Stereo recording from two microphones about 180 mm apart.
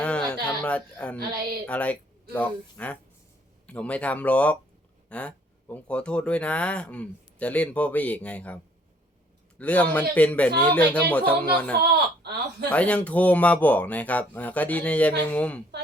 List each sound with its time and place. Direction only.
0.0 s a sound: 5° left (ahead or behind)
0.4 s speech: 5° left (ahead or behind)
9.6 s speech: 5° left (ahead or behind)
11.8 s speech: 65° right (ahead or behind)
12.7 s speech: 5° left (ahead or behind)